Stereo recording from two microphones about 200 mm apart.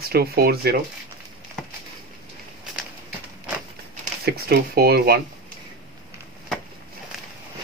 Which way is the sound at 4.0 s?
50° right (ahead or behind).